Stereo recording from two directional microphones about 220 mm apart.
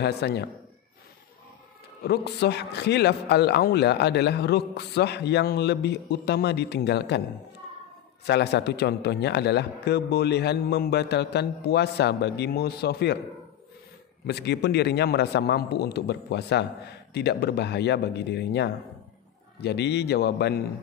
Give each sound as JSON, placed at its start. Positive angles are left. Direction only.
{"t": 0.0, "sound": "a man's voice", "side_deg": 50}
{"t": 2.0, "sound": "a man's voice", "side_deg": 50}
{"t": 8.3, "sound": "a man's voice", "side_deg": 50}
{"t": 14.2, "sound": "a man's voice", "side_deg": 50}